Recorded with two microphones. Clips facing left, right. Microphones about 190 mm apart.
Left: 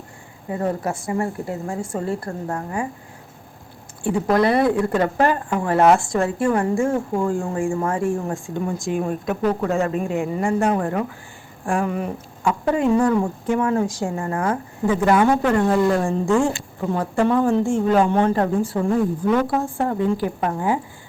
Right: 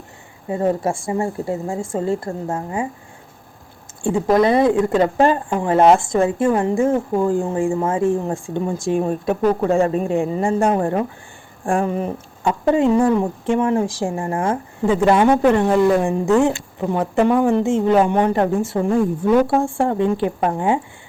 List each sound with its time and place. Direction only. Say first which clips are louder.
0.4 s speech: right 4 dB; 25° right (ahead or behind)
4.0 s speech: right 3 dB; 25° right (ahead or behind)